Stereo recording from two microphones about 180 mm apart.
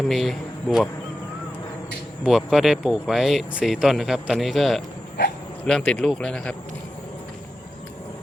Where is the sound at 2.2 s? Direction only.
Centre (ahead or behind).